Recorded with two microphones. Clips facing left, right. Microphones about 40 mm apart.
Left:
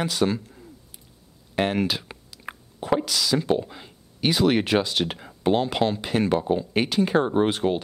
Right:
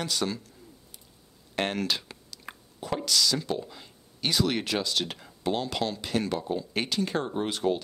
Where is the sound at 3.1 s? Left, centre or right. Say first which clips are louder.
Left 3 dB; centre.